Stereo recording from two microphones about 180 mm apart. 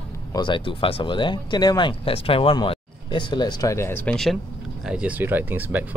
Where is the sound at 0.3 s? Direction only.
25° left (ahead or behind).